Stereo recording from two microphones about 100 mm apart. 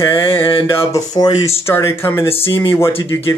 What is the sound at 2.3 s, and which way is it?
Speech, 70° left (ahead or behind).